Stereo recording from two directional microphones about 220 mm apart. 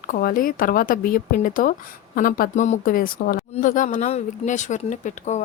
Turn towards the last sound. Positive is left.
turn(degrees=35)  # may be behind; listen again after turning